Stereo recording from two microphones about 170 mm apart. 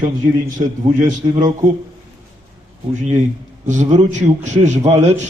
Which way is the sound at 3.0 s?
45° right (ahead or behind).